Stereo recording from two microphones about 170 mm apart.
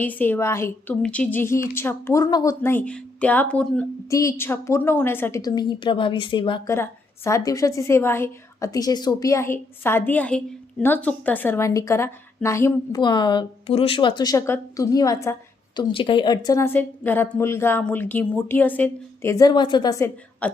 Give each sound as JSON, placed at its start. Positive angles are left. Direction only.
{"t": 0.0, "sound": "a woman's voice", "side_deg": 10}
{"t": 4.1, "sound": "speech", "side_deg": 20}
{"t": 6.7, "sound": "a woman's voice", "side_deg": 15}
{"t": 20.4, "sound": "a woman's voice", "side_deg": 10}